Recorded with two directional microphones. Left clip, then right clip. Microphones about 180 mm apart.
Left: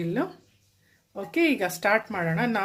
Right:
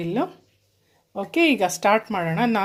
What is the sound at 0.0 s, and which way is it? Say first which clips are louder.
Speech: right 3 dB; 30° right (ahead or behind).